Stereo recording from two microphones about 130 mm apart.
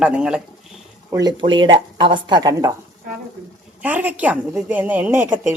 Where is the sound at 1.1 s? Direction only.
30° right (ahead or behind).